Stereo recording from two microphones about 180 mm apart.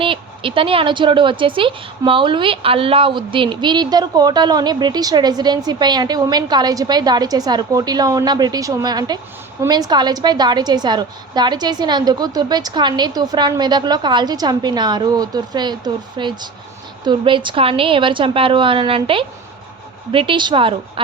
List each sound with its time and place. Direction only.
0.0 s a woman's voice: 30° right (ahead or behind)